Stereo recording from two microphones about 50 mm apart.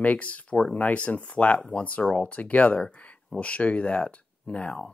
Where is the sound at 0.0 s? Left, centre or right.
Left.